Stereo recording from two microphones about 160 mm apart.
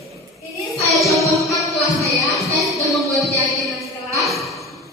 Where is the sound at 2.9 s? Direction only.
Centre (ahead or behind).